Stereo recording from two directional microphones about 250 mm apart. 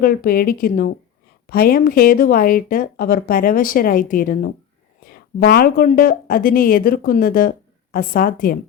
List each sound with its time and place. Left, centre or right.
0.0 s speech: left